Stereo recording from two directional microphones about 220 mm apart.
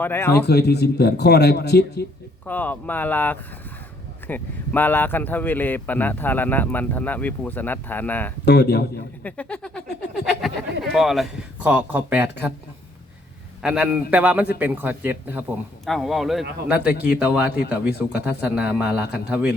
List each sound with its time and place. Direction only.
0.0 s speech: 10° left (ahead or behind)
0.4 s a man's voice: 50° left (ahead or behind)
2.5 s speech: 10° left (ahead or behind)
8.4 s a man's voice: 50° left (ahead or behind)
9.2 s speech: 5° left (ahead or behind)
10.9 s speech: centre (ahead or behind)
13.6 s a man's voice: 5° right (ahead or behind)